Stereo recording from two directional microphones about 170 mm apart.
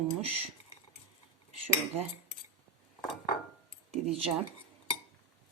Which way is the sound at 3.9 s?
35° right (ahead or behind).